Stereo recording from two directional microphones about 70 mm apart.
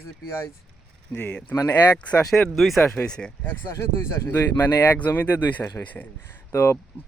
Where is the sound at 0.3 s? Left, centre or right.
Left.